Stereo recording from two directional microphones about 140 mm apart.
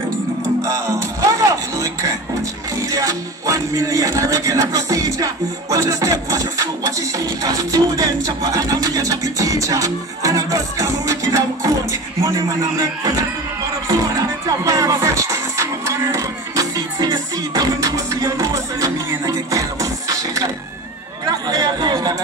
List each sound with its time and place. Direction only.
0.6 s music: 20° right (ahead or behind)
14.6 s music: 25° right (ahead or behind)
21.3 s chatter: 30° right (ahead or behind)